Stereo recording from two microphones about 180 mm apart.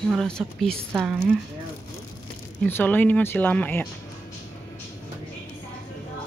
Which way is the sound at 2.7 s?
10° left (ahead or behind).